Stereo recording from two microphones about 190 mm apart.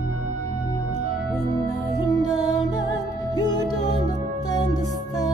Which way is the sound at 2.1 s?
20° left (ahead or behind).